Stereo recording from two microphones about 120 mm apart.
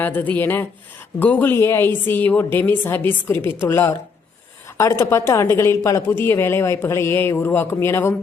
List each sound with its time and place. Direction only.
0.0 s a woman's voice: 15° left (ahead or behind)